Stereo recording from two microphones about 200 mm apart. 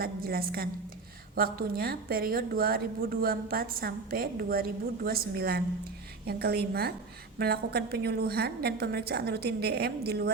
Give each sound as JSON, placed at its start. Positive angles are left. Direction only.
{"t": 0.0, "sound": "a woman's voice", "side_deg": -50}